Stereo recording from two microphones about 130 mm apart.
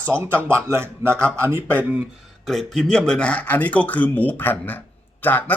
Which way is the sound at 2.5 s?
5° left (ahead or behind).